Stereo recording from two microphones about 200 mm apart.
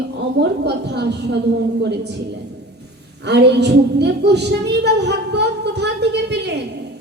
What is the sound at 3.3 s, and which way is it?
A woman's voice, 55° right (ahead or behind).